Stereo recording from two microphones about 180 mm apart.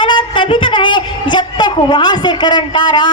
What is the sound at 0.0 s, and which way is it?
A woman's voice, 25° left (ahead or behind).